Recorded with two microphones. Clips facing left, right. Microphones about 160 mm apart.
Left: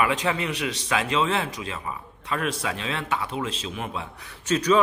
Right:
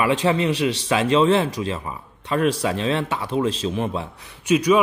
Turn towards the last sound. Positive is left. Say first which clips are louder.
# right 4 dB
turn(degrees=-10)  # may be behind; listen again after turning